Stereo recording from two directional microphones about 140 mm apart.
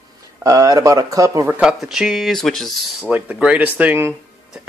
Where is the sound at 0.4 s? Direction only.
25° right (ahead or behind).